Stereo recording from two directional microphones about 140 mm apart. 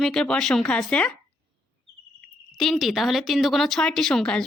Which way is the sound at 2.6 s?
Centre (ahead or behind).